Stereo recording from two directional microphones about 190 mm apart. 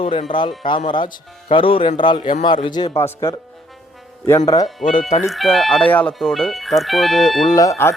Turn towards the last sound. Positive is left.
turn(degrees=15)  # may be behind; listen again after turning